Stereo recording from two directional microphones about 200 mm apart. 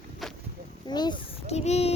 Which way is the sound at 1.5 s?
35° left (ahead or behind).